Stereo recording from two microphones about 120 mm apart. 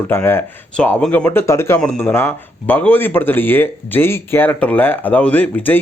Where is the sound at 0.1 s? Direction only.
20° left (ahead or behind).